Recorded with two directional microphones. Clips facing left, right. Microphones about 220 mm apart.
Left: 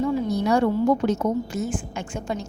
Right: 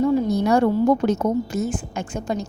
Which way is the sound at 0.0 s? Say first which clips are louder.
Right 4 dB; 45° right (ahead or behind).